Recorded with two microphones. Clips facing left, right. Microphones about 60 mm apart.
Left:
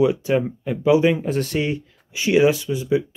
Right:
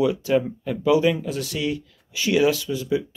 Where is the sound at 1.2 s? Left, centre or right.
Left.